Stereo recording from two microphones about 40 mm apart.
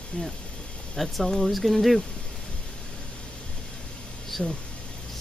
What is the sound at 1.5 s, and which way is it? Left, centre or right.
Speech, centre.